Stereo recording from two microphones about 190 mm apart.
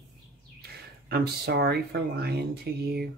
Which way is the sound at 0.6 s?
55° right (ahead or behind).